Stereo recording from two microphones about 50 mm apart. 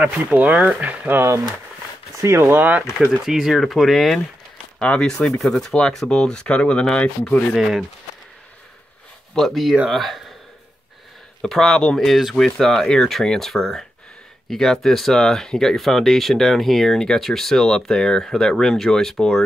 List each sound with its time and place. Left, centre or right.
0.0 s speech: right
2.1 s speech: right
2.4 s speech: right
3.1 s speech: centre
4.8 s speech: centre
7.5 s speech: centre
9.3 s speech: centre
11.4 s speech: centre
11.7 s speech: centre